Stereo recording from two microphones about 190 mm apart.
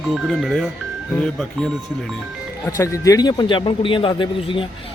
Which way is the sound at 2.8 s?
15° left (ahead or behind).